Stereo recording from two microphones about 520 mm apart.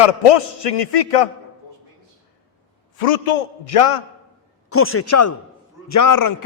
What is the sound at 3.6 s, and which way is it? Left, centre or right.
Speech, left.